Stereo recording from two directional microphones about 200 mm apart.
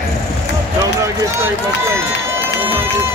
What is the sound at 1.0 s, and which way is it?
Speech, 15° right (ahead or behind).